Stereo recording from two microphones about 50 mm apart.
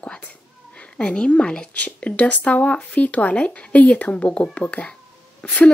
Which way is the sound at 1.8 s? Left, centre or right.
Left.